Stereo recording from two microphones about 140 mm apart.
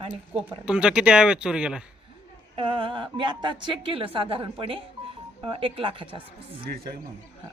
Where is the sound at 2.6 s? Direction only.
40° right (ahead or behind).